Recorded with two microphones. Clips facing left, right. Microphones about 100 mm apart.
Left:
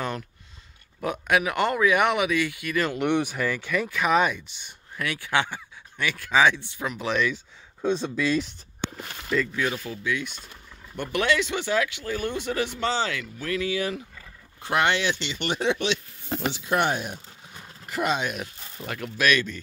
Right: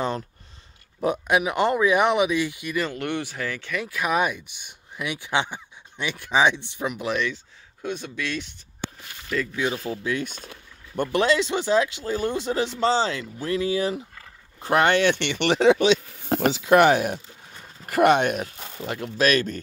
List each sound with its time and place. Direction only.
1.2 s speech: 20° right (ahead or behind)
2.9 s speech: 15° left (ahead or behind)
3.7 s speech: 5° right (ahead or behind)
7.8 s speech: 30° left (ahead or behind)
9.3 s speech: centre (ahead or behind)
9.8 s speech: 35° right (ahead or behind)
11.0 s speech: 30° right (ahead or behind); by 17.2 s 75° right (ahead or behind)
17.8 s speech: 60° right (ahead or behind)
18.8 s speech: 25° right (ahead or behind)
19.1 s speech: 35° right (ahead or behind)